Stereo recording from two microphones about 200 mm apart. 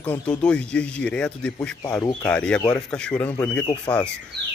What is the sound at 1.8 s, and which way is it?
Speech, 15° left (ahead or behind).